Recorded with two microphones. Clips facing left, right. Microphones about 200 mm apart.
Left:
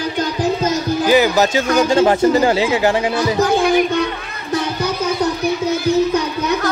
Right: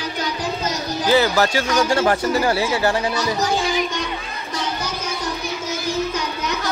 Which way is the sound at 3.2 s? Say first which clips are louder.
Left 6 dB; 55° left (ahead or behind).